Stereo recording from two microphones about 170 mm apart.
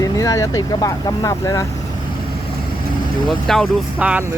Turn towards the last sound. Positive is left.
turn(degrees=-10)  # may be behind; listen again after turning